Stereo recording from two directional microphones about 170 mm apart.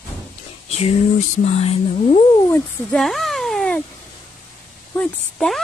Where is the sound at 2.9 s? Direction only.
Centre (ahead or behind).